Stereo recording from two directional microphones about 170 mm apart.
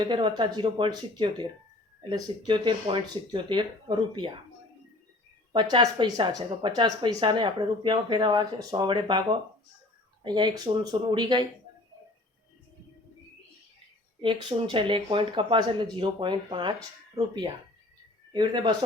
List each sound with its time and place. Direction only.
0.0 s speech: 25° right (ahead or behind)
5.5 s speech: 25° right (ahead or behind)
10.2 s speech: 25° right (ahead or behind)
14.2 s speech: 30° right (ahead or behind)